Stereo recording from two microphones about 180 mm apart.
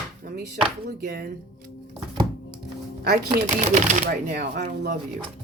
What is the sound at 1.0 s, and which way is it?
Speech, 65° right (ahead or behind).